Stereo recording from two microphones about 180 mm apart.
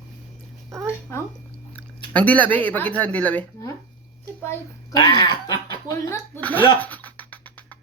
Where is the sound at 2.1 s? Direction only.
10° left (ahead or behind).